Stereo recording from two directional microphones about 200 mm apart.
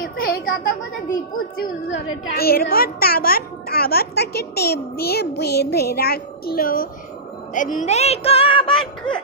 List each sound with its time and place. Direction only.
0.0 s a sound: 45° left (ahead or behind)
2.3 s a child's voice: 50° left (ahead or behind)
7.5 s music: 40° left (ahead or behind)